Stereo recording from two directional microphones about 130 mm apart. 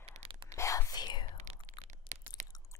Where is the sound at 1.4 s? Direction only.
60° right (ahead or behind).